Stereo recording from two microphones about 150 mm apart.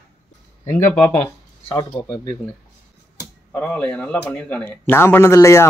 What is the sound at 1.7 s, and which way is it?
Speech, 25° left (ahead or behind).